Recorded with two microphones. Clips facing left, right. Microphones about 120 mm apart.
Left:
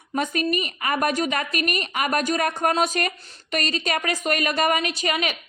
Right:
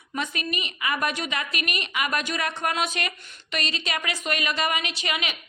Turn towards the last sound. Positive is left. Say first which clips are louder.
# left 5 dB
turn(degrees=40)  # may be behind; listen again after turning